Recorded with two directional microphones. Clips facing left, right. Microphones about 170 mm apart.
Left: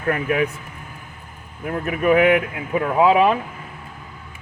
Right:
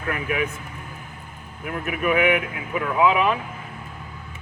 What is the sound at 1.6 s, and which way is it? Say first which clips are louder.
Speech: left 5 dB; 35° left (ahead or behind).